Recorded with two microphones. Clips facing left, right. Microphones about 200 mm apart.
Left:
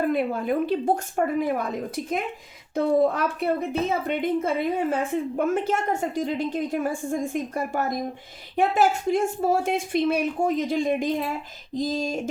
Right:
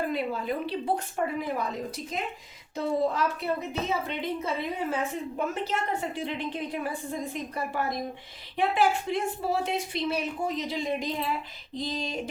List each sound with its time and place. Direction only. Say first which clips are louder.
0.1 s speech: left 6 dB; 50° left (ahead or behind)
2.7 s speech: left 6 dB; 55° left (ahead or behind)